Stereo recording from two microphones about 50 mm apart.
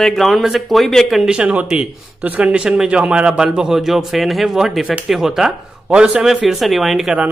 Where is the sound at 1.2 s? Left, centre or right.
Right.